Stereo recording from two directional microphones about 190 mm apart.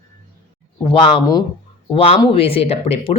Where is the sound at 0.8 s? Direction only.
25° left (ahead or behind).